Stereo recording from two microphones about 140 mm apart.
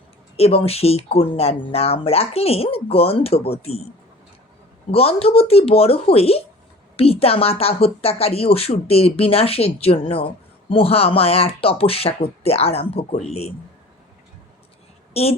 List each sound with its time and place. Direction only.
0.3 s speech: 45° left (ahead or behind)
4.9 s speech: 45° left (ahead or behind)
15.1 s a woman's voice: 45° left (ahead or behind)